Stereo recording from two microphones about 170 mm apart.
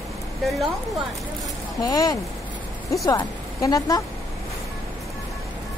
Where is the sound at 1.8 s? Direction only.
20° left (ahead or behind).